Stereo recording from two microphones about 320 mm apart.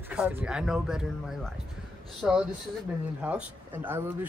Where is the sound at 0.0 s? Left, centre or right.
Centre.